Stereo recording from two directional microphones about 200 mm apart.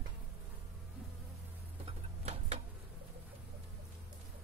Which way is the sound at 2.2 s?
30° right (ahead or behind).